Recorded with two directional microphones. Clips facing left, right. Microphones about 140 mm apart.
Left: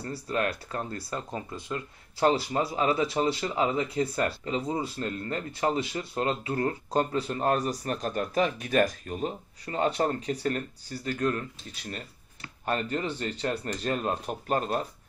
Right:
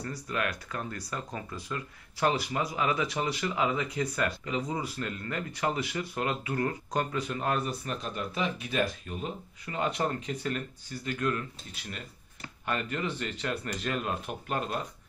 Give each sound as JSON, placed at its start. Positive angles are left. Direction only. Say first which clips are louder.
{"t": 0.0, "sound": "speech", "louder": "left 3 dB", "side_deg": 30}